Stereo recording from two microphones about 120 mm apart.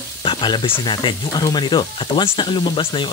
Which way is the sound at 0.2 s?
45° left (ahead or behind).